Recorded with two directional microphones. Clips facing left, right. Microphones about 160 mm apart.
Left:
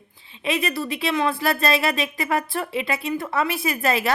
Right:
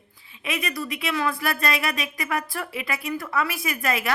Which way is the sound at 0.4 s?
30° left (ahead or behind).